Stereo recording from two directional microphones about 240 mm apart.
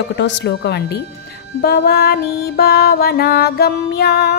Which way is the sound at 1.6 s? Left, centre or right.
Left.